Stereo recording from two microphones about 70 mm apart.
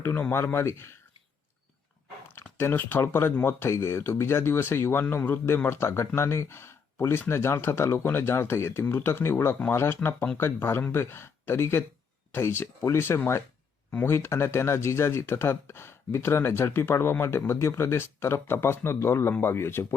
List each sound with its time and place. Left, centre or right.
0.3 s speech: left
2.3 s speech: left